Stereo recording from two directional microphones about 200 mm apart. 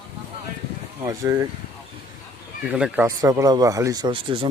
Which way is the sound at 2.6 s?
5° right (ahead or behind).